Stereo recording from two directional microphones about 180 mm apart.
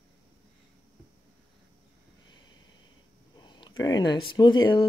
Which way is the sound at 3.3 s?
25° left (ahead or behind).